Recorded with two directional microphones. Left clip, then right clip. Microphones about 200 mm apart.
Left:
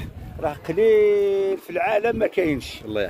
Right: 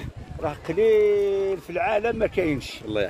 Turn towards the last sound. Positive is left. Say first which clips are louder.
# even
turn(degrees=0)  # may be behind; listen again after turning